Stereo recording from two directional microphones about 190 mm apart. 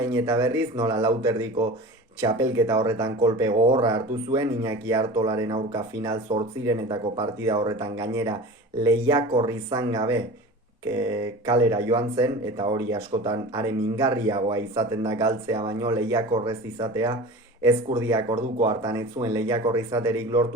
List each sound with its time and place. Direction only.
0.1 s speech: 15° right (ahead or behind)